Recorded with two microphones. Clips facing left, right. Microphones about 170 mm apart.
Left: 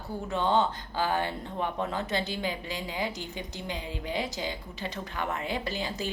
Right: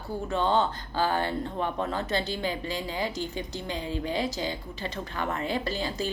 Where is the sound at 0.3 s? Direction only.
15° left (ahead or behind).